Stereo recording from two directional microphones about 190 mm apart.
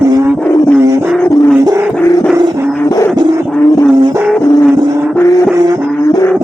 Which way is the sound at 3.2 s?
20° right (ahead or behind).